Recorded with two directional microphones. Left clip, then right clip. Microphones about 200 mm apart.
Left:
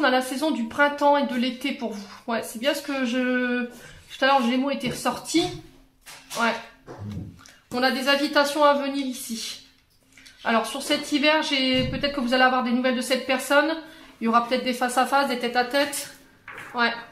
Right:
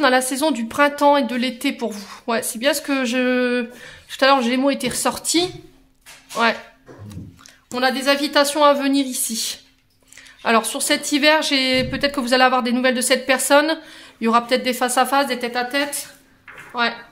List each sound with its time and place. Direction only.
0.0 s a woman's voice: 40° right (ahead or behind)
7.7 s a woman's voice: 30° right (ahead or behind)